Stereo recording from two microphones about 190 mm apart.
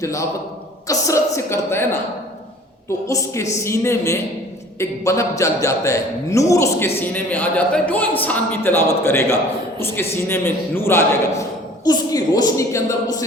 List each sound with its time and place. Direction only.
0.0 s a man's voice: 15° left (ahead or behind)
3.1 s a man's voice: 15° left (ahead or behind)